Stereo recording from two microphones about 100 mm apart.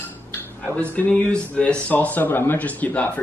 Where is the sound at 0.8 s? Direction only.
15° left (ahead or behind).